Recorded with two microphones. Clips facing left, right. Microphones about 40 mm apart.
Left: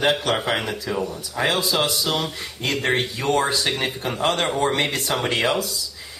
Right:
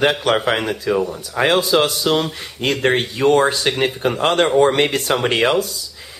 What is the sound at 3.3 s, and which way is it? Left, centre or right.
Speech, right.